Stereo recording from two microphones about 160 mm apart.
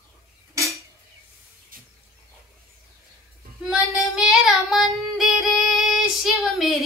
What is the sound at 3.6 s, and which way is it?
Music, 5° right (ahead or behind).